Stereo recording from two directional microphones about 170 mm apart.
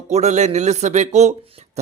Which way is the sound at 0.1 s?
40° right (ahead or behind).